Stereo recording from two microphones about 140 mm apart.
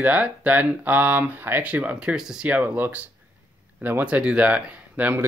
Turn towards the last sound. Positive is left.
turn(degrees=-10)  # may be behind; listen again after turning